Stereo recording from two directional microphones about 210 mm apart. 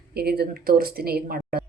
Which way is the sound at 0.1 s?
50° right (ahead or behind).